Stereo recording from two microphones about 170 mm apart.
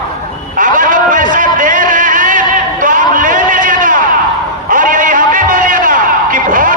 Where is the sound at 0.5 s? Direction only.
50° right (ahead or behind).